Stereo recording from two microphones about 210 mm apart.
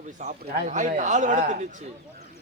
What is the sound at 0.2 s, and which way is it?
A man's voice, 35° right (ahead or behind).